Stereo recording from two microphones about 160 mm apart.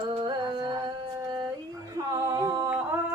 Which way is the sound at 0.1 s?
30° right (ahead or behind).